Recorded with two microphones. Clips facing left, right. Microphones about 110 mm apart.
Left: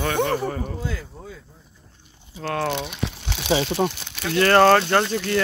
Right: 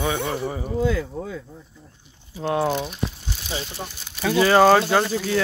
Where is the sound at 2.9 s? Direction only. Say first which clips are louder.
Even; 80° left.